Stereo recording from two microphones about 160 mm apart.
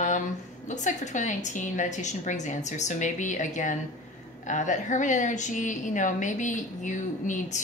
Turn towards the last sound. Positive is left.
turn(degrees=50)  # may be behind; listen again after turning